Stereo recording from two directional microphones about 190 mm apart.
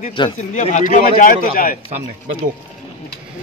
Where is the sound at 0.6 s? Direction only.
40° left (ahead or behind).